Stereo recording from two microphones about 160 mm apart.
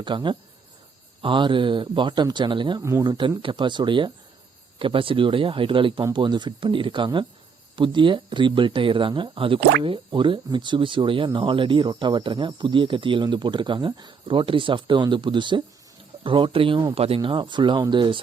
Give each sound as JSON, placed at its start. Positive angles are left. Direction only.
{"t": 0.0, "sound": "speech", "side_deg": -30}